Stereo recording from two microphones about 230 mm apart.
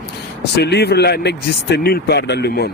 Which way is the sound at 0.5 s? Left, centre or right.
Left.